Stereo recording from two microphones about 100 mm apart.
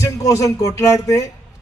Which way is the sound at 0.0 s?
30° left (ahead or behind).